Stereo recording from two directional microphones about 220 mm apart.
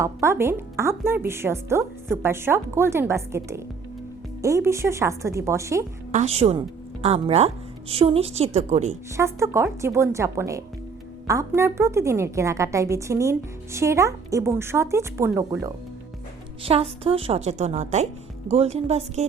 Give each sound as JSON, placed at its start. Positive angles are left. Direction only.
{"t": 0.0, "sound": "a woman's voice", "side_deg": -10}
{"t": 6.1, "sound": "a woman's voice", "side_deg": -30}
{"t": 9.1, "sound": "a woman's voice", "side_deg": -15}
{"t": 16.6, "sound": "a woman's voice", "side_deg": -25}